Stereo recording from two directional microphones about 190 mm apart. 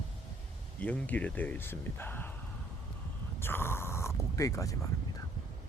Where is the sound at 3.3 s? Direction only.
10° left (ahead or behind).